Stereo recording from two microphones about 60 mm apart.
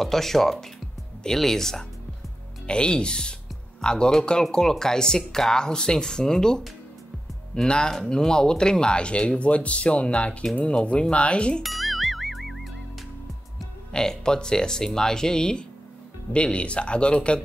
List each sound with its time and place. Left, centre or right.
0.0 s speech: centre
11.6 s music: centre
13.9 s speech: centre